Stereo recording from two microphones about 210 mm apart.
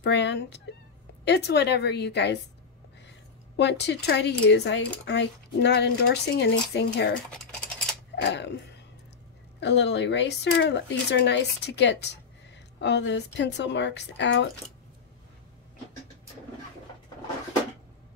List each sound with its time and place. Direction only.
0.0 s a woman's voice: 55° left (ahead or behind)
8.2 s speech: 55° left (ahead or behind)
9.6 s speech: 55° left (ahead or behind)